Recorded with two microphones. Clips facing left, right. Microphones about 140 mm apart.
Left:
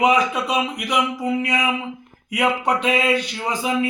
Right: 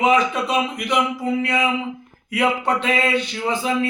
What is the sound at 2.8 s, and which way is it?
Speech, 10° left (ahead or behind).